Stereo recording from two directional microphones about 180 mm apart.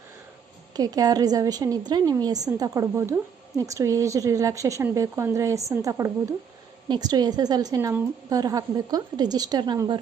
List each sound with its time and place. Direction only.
0.8 s a woman's voice: 20° right (ahead or behind)